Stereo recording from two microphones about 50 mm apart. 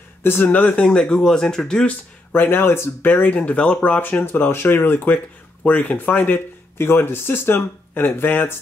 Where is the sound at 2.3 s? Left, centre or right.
Left.